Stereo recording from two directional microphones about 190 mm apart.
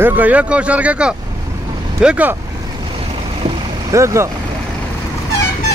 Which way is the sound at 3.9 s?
15° right (ahead or behind).